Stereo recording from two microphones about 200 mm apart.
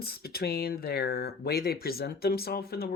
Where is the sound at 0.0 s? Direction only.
50° left (ahead or behind).